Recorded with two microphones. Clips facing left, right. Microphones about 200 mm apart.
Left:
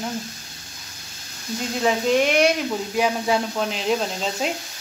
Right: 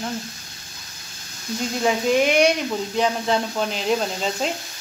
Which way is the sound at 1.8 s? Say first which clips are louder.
Even; centre (ahead or behind).